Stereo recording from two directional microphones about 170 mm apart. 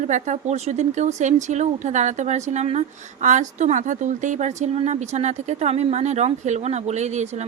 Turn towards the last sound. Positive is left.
turn(degrees=-40)  # may be behind; listen again after turning